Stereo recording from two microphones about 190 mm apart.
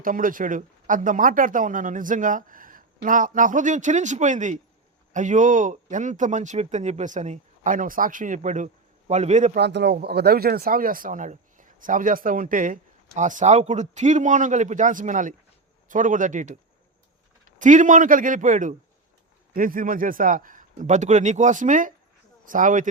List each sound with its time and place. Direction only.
0.0 s speech: 45° right (ahead or behind)
9.6 s speech: 65° right (ahead or behind); by 16.6 s 40° right (ahead or behind)
17.6 s speech: 40° right (ahead or behind)